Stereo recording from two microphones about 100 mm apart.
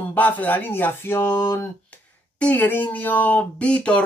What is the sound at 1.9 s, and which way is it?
Speech, 15° left (ahead or behind).